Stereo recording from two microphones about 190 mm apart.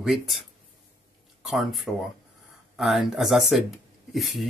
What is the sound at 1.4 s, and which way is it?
Speech, centre (ahead or behind).